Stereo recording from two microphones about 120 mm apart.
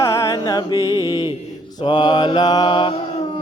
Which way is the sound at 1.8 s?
40° left (ahead or behind).